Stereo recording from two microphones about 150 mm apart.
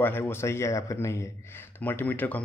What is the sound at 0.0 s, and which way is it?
A man's voice, 15° left (ahead or behind).